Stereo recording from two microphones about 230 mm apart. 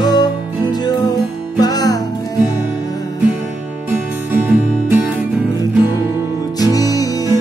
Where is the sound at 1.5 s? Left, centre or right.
Centre.